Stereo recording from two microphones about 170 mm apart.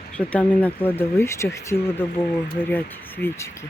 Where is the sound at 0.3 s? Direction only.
10° left (ahead or behind).